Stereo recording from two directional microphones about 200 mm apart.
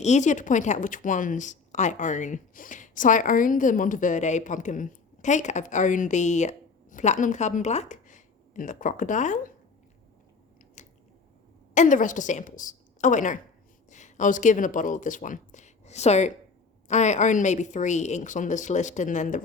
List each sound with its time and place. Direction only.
0.0 s speech: 35° left (ahead or behind)
10.8 s biting: 35° left (ahead or behind)
11.7 s a woman's voice: 40° left (ahead or behind)